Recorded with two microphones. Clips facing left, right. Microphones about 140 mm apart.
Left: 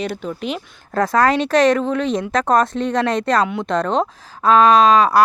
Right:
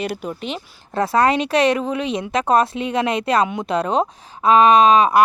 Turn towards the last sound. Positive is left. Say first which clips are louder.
# even
turn(degrees=-15)  # may be behind; listen again after turning